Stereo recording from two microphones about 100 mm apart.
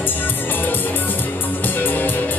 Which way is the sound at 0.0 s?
20° left (ahead or behind).